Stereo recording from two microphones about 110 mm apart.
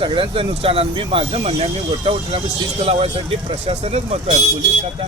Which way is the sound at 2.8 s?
65° right (ahead or behind).